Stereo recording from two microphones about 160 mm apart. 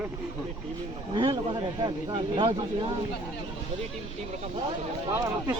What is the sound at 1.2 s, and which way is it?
A man's voice, 30° right (ahead or behind).